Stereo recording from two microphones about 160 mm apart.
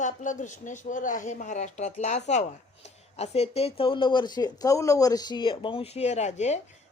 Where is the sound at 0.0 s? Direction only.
50° left (ahead or behind).